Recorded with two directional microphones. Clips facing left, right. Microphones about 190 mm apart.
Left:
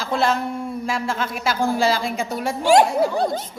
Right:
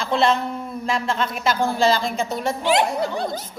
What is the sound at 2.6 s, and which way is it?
Speech, 45° left (ahead or behind).